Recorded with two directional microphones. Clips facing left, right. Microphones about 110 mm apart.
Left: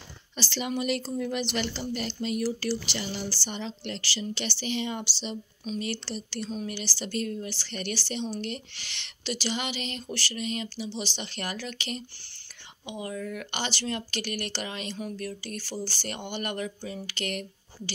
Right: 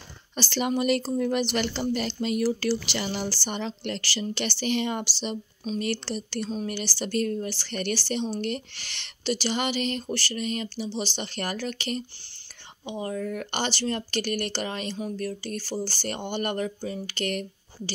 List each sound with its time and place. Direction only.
0.4 s speech: 50° right (ahead or behind)
1.7 s speech: 80° right; by 17.9 s 40° right (ahead or behind)